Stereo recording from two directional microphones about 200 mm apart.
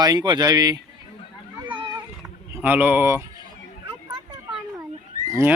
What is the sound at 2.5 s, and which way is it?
Speech, 10° right (ahead or behind).